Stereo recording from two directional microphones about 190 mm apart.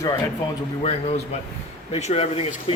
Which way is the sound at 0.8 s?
35° left (ahead or behind).